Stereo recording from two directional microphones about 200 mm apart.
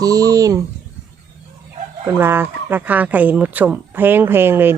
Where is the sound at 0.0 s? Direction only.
20° right (ahead or behind).